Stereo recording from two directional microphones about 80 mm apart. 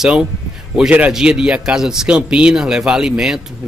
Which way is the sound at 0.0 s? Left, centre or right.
Centre.